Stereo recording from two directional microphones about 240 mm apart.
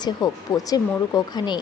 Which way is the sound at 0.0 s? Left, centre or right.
Centre.